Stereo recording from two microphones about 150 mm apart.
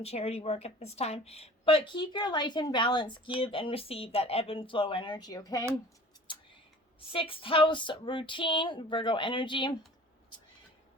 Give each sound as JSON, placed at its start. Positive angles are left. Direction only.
{"t": 0.0, "sound": "a woman's voice", "side_deg": 45}
{"t": 7.1, "sound": "a woman's voice", "side_deg": 35}